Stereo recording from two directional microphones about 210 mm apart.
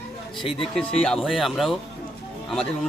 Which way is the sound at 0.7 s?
5° left (ahead or behind).